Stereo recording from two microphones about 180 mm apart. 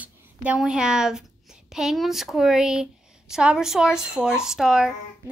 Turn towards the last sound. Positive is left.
turn(degrees=-5)  # may be behind; listen again after turning